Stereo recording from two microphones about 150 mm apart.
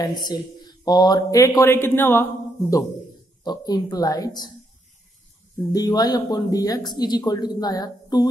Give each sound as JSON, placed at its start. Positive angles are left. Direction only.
{"t": 0.0, "sound": "speech", "side_deg": 30}
{"t": 3.4, "sound": "speech", "side_deg": 25}
{"t": 5.7, "sound": "speech", "side_deg": 25}